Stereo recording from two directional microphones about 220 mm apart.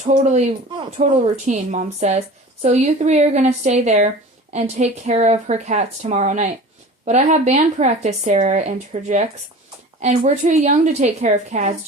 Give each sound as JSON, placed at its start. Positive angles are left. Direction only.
{"t": 0.0, "sound": "a woman's voice", "side_deg": -35}